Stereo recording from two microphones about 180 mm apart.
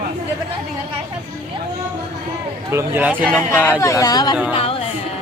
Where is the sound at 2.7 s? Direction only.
10° right (ahead or behind).